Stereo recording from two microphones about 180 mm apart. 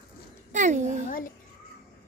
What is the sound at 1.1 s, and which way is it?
Speech, 50° left (ahead or behind).